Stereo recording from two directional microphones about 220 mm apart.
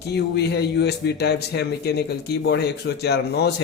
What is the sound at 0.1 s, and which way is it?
A man's voice, 50° left (ahead or behind).